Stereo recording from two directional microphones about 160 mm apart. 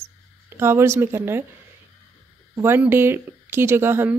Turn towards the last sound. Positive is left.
turn(degrees=-15)  # may be behind; listen again after turning